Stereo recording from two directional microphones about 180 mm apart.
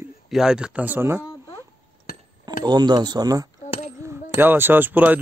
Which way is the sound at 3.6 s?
40° left (ahead or behind).